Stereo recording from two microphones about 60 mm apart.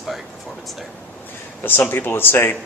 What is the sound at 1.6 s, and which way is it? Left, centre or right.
Speech, left.